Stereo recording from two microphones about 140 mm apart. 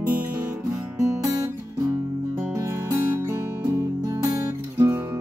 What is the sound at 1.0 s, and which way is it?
Guitar, 25° right (ahead or behind).